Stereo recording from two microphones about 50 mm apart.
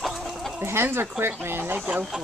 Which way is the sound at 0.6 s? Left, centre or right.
Right.